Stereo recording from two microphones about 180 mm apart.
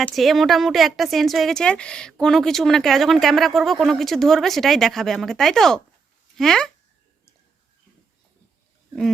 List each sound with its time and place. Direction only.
0.0 s a woman's voice: centre (ahead or behind)